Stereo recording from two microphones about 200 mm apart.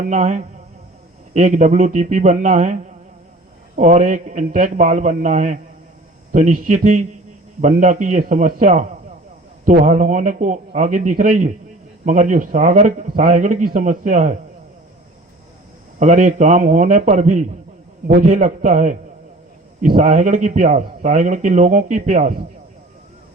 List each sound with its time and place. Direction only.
0.1 s a man's voice: 35° right (ahead or behind)
16.0 s a man's voice: 40° right (ahead or behind)